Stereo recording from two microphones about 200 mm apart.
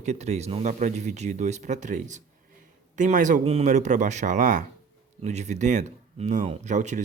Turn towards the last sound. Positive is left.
turn(degrees=-35)  # may be behind; listen again after turning